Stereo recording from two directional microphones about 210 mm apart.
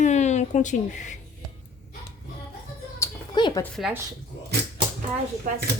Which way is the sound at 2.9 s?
15° left (ahead or behind).